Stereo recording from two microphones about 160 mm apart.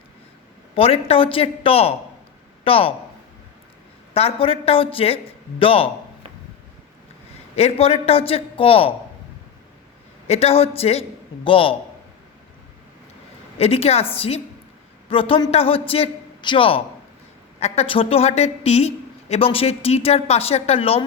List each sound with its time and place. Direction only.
0.8 s a woman's voice: 35° left (ahead or behind)
4.1 s a woman's voice: 35° left (ahead or behind)
7.5 s a woman's voice: 40° left (ahead or behind)
10.2 s a woman's voice: 40° left (ahead or behind)
13.6 s a woman's voice: 40° left (ahead or behind)